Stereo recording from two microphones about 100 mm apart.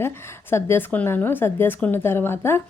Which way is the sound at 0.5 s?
20° left (ahead or behind).